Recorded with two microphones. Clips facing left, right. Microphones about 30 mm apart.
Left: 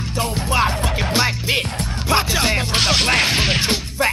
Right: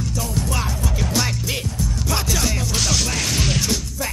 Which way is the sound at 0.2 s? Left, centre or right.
Left.